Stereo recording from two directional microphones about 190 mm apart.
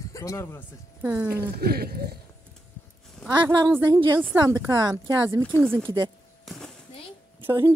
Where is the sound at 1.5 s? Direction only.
55° right (ahead or behind).